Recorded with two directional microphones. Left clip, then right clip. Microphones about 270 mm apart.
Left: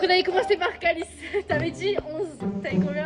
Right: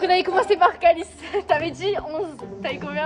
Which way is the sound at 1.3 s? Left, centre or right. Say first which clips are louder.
Right 5 dB; right.